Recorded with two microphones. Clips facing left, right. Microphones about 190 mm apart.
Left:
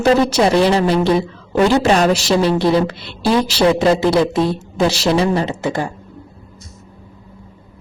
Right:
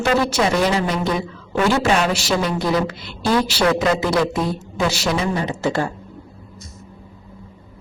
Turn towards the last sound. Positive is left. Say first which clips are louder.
# even
turn(degrees=15)  # may be behind; listen again after turning